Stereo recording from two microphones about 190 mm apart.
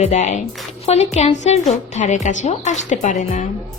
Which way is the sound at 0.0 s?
35° left (ahead or behind).